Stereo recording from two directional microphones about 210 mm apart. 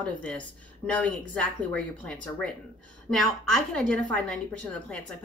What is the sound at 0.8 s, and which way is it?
A woman's voice, 5° left (ahead or behind).